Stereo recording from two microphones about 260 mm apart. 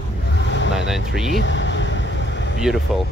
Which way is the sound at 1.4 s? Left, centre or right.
Left.